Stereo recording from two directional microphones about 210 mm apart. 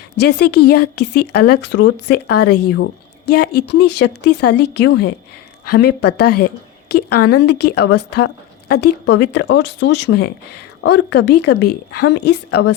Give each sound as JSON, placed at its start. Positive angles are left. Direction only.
{"t": 0.2, "sound": "a woman's voice", "side_deg": 55}